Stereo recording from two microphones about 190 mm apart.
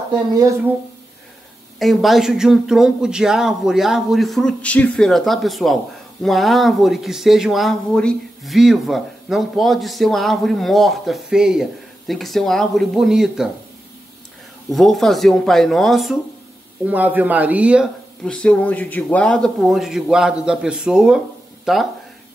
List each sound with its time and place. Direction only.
0.3 s speech: 15° right (ahead or behind)
1.8 s speech: centre (ahead or behind)
14.7 s speech: centre (ahead or behind)
18.2 s speech: 5° left (ahead or behind)